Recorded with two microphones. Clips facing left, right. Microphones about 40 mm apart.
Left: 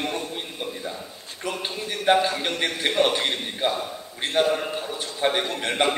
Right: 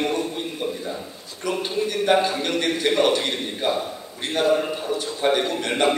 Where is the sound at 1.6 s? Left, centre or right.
Centre.